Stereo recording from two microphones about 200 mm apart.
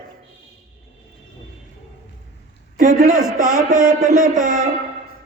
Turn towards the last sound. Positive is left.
turn(degrees=-40)  # may be behind; listen again after turning